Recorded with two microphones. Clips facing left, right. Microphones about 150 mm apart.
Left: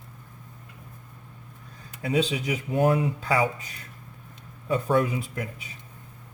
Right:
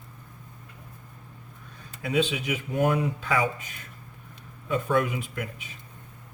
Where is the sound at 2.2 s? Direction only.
35° left (ahead or behind).